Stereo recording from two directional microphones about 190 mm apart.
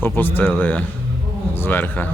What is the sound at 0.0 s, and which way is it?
Speech, 10° left (ahead or behind).